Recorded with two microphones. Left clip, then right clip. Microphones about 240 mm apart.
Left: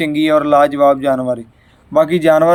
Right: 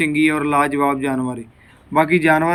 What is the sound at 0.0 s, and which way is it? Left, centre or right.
Speech, centre.